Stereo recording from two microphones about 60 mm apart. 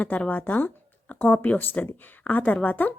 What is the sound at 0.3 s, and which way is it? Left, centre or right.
A woman's voice, left.